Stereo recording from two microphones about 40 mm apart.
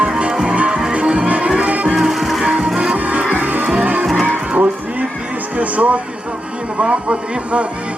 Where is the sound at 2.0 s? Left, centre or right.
Centre.